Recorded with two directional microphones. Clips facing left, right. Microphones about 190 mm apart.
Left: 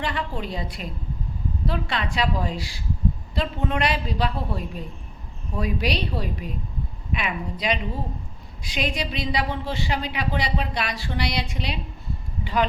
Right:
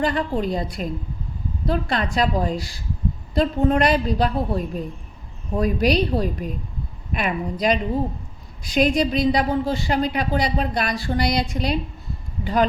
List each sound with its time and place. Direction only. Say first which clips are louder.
0.0 s a woman's voice: right 7 dB; 40° right (ahead or behind)